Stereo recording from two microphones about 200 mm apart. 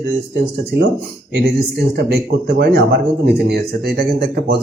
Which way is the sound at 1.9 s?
55° right (ahead or behind).